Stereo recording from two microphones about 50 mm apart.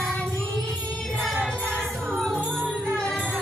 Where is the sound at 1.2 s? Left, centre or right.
Centre.